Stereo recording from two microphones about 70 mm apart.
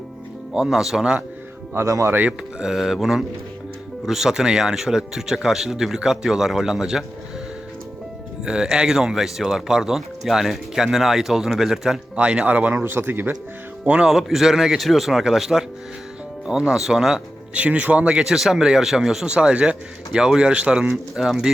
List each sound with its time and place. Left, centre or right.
0.5 s speech: centre
1.7 s speech: right
2.6 s speech: centre
8.4 s speech: centre
12.1 s speech: centre; by 13.3 s right
13.8 s speech: centre
17.5 s speech: centre
20.9 s speech: centre